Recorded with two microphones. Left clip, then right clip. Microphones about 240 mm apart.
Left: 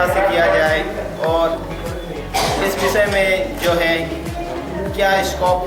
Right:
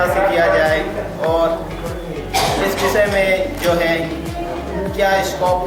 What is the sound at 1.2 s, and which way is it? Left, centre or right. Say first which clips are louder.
Speech: right 1 dB; left.